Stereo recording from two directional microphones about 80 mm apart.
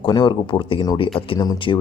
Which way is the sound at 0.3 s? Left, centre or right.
Left.